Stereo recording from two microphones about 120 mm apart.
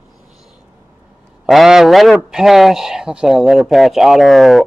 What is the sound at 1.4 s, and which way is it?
A man's voice, 5° right (ahead or behind).